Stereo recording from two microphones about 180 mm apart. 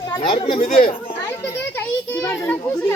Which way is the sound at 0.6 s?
50° left (ahead or behind).